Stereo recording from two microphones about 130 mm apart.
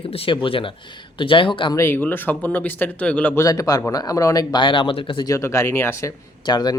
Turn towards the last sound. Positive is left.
turn(degrees=30)  # may be behind; listen again after turning